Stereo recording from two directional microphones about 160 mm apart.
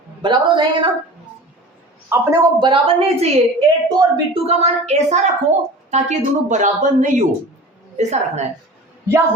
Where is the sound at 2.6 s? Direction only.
35° right (ahead or behind).